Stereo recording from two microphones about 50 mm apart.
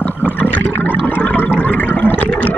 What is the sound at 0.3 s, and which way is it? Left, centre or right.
Water, left.